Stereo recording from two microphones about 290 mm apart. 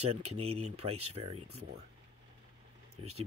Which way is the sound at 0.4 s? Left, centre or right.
Right.